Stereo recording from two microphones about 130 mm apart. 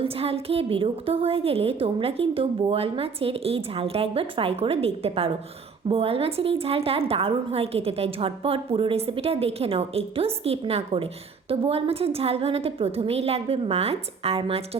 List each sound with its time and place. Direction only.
0.0 s a woman's voice: 50° right (ahead or behind)